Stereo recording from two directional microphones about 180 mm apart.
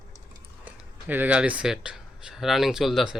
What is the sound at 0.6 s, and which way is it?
A man's voice, 10° right (ahead or behind).